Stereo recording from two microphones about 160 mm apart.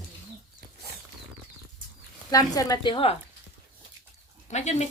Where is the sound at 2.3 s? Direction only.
25° left (ahead or behind).